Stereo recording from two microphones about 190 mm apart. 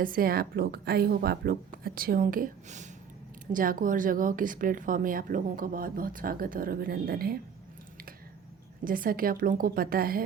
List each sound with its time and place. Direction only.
0.0 s a woman's voice: 50° right (ahead or behind)
8.8 s a woman's voice: 50° right (ahead or behind)